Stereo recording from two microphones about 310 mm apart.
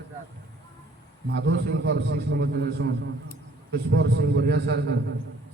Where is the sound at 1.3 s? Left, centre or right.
Right.